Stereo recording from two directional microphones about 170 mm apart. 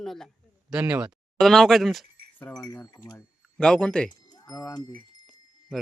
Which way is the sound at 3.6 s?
5° left (ahead or behind).